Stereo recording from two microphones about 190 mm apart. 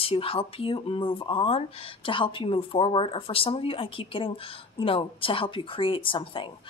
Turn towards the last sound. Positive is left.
turn(degrees=25)  # may be behind; listen again after turning